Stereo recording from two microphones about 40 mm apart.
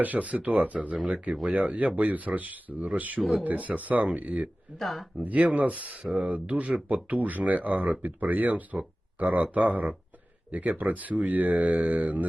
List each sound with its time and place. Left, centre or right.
0.0 s speech: right
4.8 s speech: centre
5.2 s speech: right